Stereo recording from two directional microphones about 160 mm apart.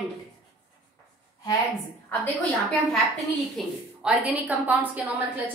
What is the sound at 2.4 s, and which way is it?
A woman's voice, centre (ahead or behind).